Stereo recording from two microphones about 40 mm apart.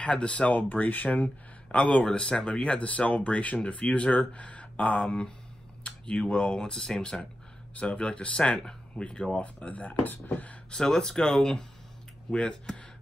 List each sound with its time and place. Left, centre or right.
0.0 s speech: left
1.0 s speech: left
2.8 s speech: left; by 7.2 s centre
7.7 s speech: left
9.4 s speech: left
10.0 s speech: left
10.7 s speech: left